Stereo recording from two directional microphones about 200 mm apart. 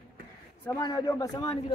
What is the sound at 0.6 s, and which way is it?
Speech, 15° left (ahead or behind).